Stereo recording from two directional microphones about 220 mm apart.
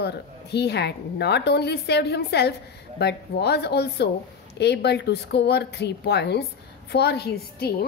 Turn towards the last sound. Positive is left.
turn(degrees=45)  # may be behind; listen again after turning